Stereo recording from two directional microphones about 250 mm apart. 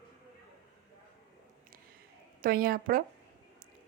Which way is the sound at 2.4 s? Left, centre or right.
Right.